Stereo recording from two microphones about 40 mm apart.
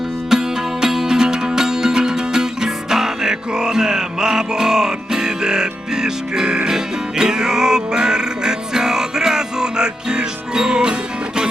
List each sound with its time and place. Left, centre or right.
0.3 s music: centre